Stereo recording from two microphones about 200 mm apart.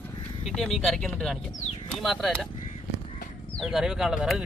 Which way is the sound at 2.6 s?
40° left (ahead or behind).